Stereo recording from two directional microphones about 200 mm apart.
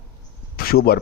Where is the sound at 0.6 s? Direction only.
50° left (ahead or behind).